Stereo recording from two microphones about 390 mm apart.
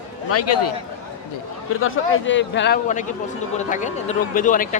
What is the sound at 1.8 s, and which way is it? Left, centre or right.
A man's voice, left.